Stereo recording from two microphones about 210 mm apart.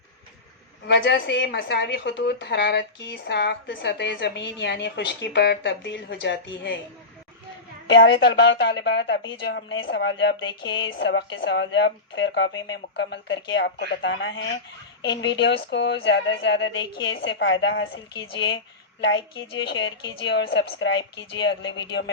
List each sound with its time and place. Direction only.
0.9 s a woman's voice: 60° left (ahead or behind)
7.9 s a woman's voice: 55° left (ahead or behind)
18.1 s a woman's voice: 20° left (ahead or behind)
19.5 s a woman's voice: 60° left (ahead or behind)